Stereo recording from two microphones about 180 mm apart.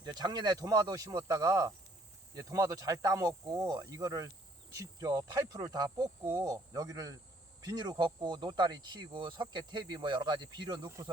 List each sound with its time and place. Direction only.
0.0 s speech: 25° right (ahead or behind)